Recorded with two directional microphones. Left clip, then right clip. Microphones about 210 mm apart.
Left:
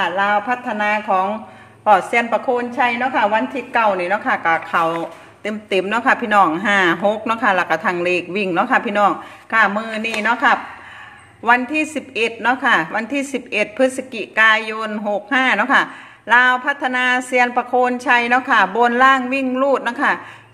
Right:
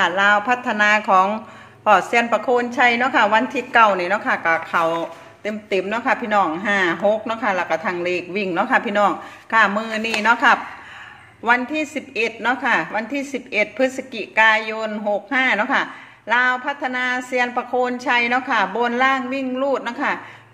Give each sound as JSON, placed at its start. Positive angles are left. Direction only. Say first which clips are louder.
{"t": 0.0, "sound": "a woman's voice", "louder": "right 1 dB", "side_deg": -10}
{"t": 1.9, "sound": "a woman's voice", "louder": "left 1 dB", "side_deg": -5}
{"t": 11.4, "sound": "a woman's voice", "louder": "left 3 dB", "side_deg": 10}